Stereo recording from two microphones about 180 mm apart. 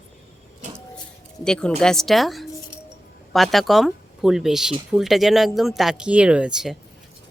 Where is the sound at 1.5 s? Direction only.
5° left (ahead or behind).